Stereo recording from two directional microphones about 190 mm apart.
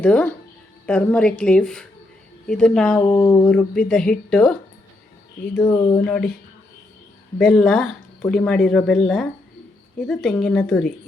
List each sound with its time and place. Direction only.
0.0 s a woman's voice: 5° left (ahead or behind)
3.0 s speech: 20° left (ahead or behind)
3.4 s speech: 5° left (ahead or behind)
5.6 s speech: 20° left (ahead or behind)
6.1 s speech: 5° left (ahead or behind)
7.3 s speech: 5° left (ahead or behind)